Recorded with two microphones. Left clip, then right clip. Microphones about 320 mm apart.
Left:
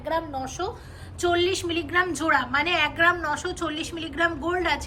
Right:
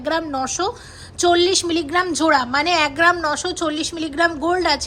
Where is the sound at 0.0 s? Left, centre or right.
Right.